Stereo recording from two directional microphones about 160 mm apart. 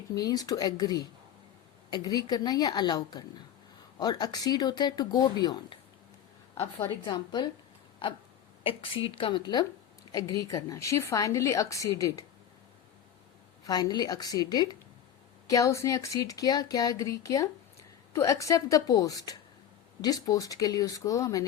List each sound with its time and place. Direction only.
0.2 s a woman's voice: 25° left (ahead or behind)
13.7 s a woman's voice: 25° left (ahead or behind)